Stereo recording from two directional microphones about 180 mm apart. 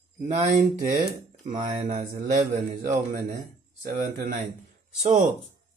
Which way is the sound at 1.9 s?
40° right (ahead or behind).